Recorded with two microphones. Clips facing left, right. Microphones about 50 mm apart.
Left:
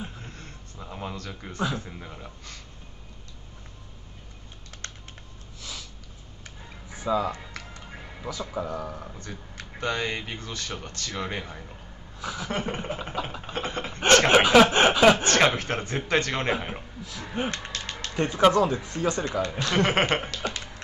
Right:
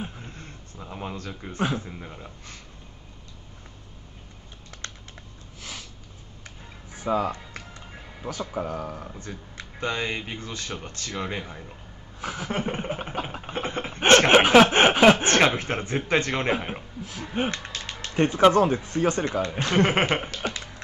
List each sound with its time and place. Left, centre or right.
0.2 s a sound: right
0.7 s speech: centre
5.6 s snort: right
7.1 s speech: right
8.0 s music: centre
8.5 s speech: right
9.8 s a man's voice: right
12.2 s a sound: right
12.4 s speech: right
13.5 s a sound: right
16.1 s a man's voice: right
19.9 s a man's voice: right